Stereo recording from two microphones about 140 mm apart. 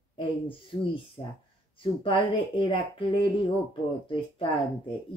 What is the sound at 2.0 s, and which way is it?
A woman's voice, 40° left (ahead or behind).